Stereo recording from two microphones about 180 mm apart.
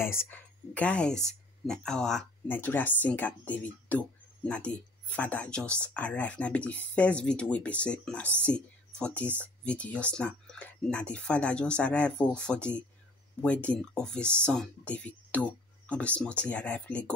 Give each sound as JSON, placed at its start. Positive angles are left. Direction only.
{"t": 0.0, "sound": "speech", "side_deg": 15}